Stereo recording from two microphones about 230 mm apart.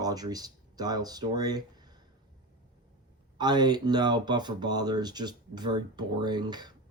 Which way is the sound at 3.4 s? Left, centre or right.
Centre.